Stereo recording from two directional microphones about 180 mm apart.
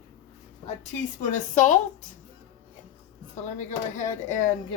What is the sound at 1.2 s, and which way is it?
Speech, 45° left (ahead or behind).